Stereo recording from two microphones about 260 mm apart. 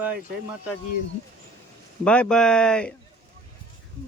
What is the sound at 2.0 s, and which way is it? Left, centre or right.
Speech, centre.